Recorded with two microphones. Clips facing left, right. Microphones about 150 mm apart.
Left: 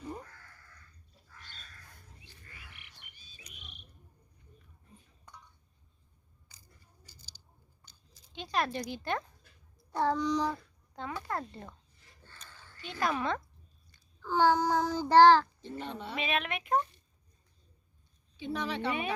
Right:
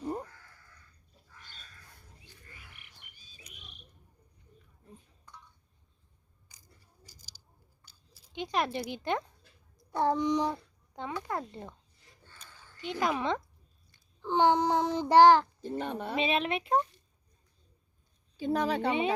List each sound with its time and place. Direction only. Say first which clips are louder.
6.5 s biting: even; 10° right (ahead or behind)
7.9 s a sound: even; 15° right (ahead or behind)
8.9 s a child's voice: right 2 dB; 20° right (ahead or behind)
12.2 s a sound: left 1 dB; 15° right (ahead or behind)
14.2 s child singing: right 1 dB; 20° right (ahead or behind)
15.8 s speech: right 4 dB; 50° right (ahead or behind)
16.1 s child singing: right 4 dB; 30° right (ahead or behind)
18.3 s speech: right 6 dB; 45° right (ahead or behind)
18.9 s child singing: right 3 dB; 25° right (ahead or behind)